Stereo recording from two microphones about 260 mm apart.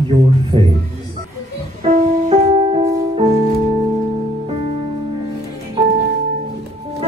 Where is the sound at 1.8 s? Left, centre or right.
Right.